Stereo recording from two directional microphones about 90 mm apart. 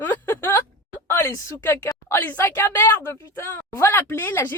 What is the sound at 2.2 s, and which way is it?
Speech, 20° left (ahead or behind).